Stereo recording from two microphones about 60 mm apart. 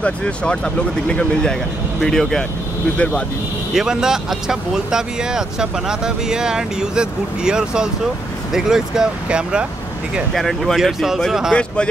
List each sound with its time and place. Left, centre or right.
0.0 s speech: centre
3.7 s speech: centre
10.3 s speech: centre
11.5 s speech: centre